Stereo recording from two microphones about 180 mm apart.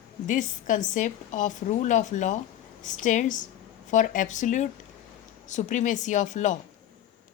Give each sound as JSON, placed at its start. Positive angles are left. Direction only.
{"t": 0.3, "sound": "speech", "side_deg": 45}